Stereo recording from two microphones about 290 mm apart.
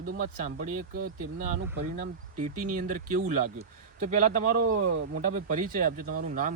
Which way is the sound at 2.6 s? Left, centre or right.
Right.